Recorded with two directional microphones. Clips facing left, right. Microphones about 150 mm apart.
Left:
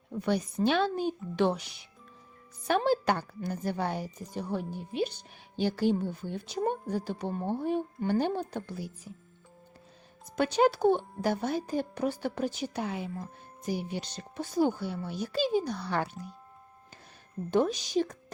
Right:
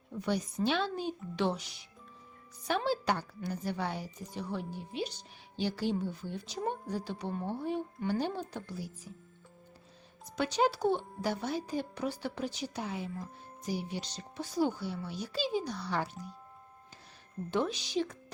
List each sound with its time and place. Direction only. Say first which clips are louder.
0.1 s speech: left 4 dB; 55° left (ahead or behind)
2.6 s speech: left 5 dB; 50° left (ahead or behind)
10.3 s speech: left 5 dB; 55° left (ahead or behind)
17.5 s speech: left 5 dB; 45° left (ahead or behind)